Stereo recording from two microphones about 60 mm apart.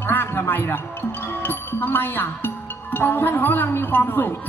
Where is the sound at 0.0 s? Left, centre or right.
Left.